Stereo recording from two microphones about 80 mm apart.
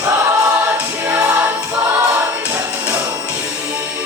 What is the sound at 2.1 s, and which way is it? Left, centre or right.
Music, right.